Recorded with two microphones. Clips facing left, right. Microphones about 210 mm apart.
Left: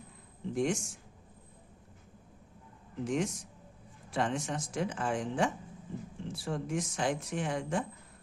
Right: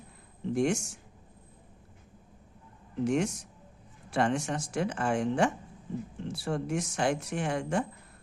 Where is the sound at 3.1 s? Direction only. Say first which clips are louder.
Right 4 dB; 70° right (ahead or behind).